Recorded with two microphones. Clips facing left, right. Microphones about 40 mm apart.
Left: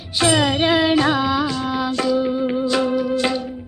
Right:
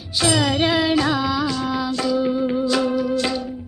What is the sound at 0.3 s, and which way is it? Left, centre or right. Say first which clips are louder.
Music: left 2 dB; left.